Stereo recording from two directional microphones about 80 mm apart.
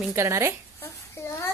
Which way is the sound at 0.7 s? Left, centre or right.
Left.